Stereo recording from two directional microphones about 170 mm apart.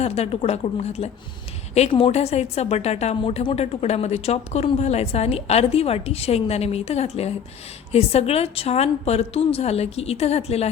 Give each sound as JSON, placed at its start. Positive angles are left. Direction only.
{"t": 0.0, "sound": "a woman's voice", "side_deg": 40}